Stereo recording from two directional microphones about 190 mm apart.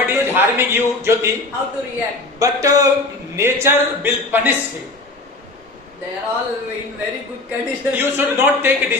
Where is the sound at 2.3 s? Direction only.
15° right (ahead or behind).